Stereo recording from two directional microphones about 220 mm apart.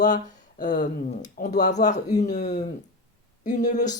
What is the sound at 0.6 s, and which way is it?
Speech, 35° left (ahead or behind).